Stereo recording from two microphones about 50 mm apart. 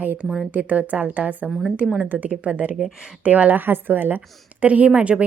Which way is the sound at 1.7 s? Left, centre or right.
Right.